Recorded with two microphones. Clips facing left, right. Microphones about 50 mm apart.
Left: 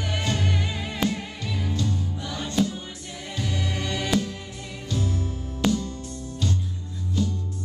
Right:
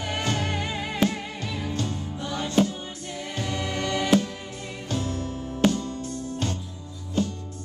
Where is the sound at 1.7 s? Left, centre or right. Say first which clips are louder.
Left 1 dB; right.